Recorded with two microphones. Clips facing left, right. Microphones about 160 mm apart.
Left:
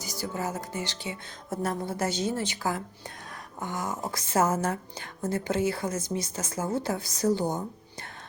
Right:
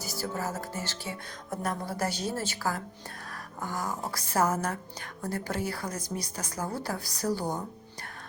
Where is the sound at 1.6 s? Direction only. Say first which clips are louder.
Left 2 dB; 25° left (ahead or behind).